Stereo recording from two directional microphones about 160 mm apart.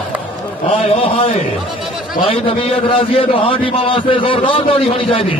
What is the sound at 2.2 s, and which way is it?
A man's voice, 35° left (ahead or behind).